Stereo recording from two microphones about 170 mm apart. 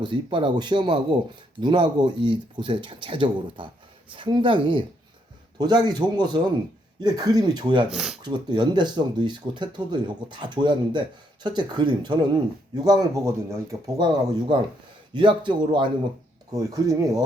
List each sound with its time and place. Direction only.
0.0 s speech: 30° right (ahead or behind)
7.9 s speech: 5° right (ahead or behind)
8.2 s speech: 25° right (ahead or behind)